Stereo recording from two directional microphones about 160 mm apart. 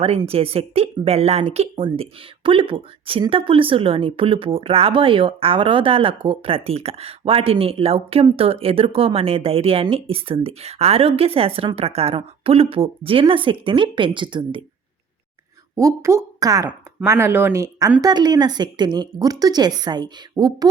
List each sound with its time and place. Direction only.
0.3 s speech: 40° right (ahead or behind)
15.7 s a woman's voice: 20° right (ahead or behind)